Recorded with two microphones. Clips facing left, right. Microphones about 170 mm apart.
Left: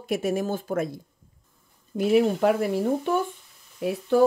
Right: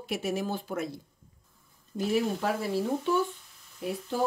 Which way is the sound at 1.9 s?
60° left (ahead or behind).